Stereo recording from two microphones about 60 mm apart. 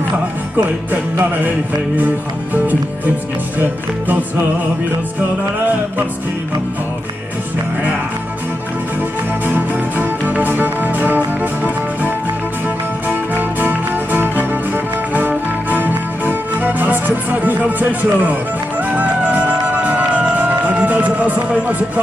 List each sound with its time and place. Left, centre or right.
0.9 s music: right
2.0 s speech: right
9.5 s music: right
13.1 s music: right